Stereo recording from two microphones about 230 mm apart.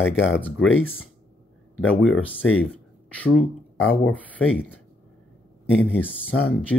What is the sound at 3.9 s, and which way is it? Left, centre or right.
Speech, centre.